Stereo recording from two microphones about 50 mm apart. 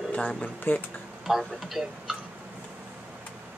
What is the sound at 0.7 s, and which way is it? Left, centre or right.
Speech, left.